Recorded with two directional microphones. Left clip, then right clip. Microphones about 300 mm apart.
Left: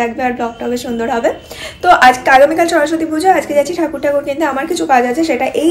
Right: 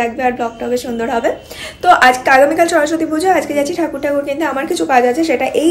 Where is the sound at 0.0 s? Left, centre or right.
Centre.